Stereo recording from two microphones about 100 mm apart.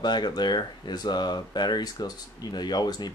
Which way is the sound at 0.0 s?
45° left (ahead or behind).